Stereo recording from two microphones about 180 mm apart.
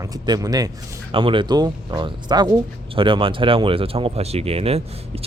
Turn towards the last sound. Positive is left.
turn(degrees=-35)  # may be behind; listen again after turning